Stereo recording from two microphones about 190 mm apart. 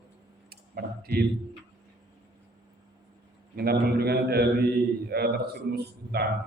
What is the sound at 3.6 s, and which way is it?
A man's voice, 55° right (ahead or behind).